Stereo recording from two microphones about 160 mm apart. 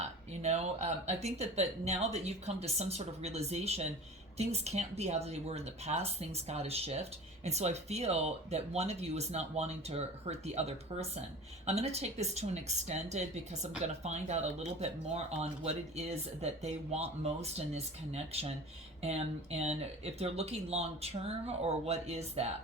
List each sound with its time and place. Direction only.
0.0 s speech: 45° right (ahead or behind)